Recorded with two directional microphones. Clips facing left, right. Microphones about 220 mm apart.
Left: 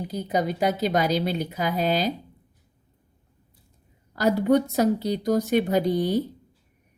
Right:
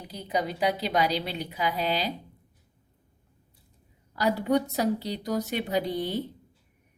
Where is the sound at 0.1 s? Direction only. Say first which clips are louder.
Left 3 dB; 45° left (ahead or behind).